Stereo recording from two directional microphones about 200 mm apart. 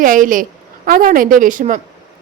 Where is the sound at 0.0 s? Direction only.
40° right (ahead or behind).